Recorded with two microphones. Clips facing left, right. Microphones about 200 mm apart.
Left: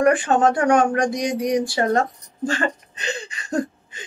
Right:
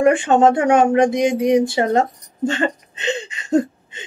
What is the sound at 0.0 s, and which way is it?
Speech, 25° right (ahead or behind).